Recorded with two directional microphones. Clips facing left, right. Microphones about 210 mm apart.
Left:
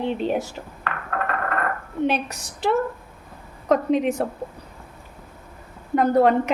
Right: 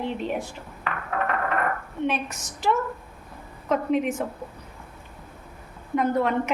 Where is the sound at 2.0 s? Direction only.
35° left (ahead or behind).